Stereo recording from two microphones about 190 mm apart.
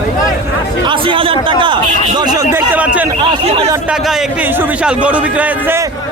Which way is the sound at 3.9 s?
Centre (ahead or behind).